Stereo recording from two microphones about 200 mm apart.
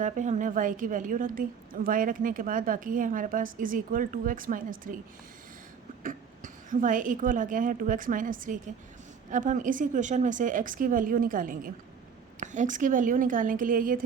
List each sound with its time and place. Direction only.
0.0 s a woman's voice: 40° right (ahead or behind)
6.0 s speech: 40° right (ahead or behind)